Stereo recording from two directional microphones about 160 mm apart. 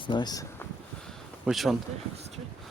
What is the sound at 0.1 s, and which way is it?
Speech, 25° left (ahead or behind).